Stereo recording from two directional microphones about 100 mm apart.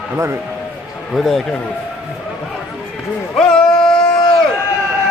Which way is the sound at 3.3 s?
5° left (ahead or behind).